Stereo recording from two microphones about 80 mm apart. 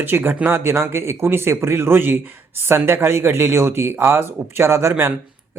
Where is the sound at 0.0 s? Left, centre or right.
Right.